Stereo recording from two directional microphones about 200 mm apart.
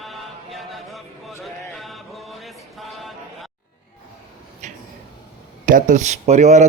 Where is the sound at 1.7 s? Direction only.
Centre (ahead or behind).